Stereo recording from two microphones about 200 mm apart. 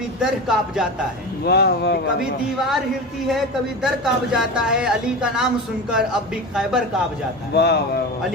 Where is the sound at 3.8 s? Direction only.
5° right (ahead or behind).